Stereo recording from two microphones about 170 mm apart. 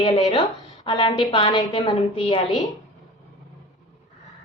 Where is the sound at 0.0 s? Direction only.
25° left (ahead or behind).